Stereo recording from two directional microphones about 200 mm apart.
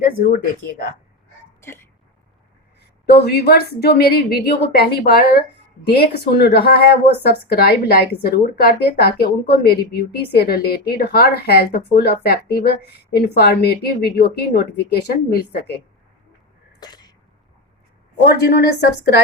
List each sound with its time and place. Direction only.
0.0 s speech: 50° left (ahead or behind)
1.6 s speech: 10° left (ahead or behind)
3.1 s a woman's voice: 55° left (ahead or behind)
16.8 s sneeze: 20° left (ahead or behind)
18.3 s a woman's voice: 55° left (ahead or behind)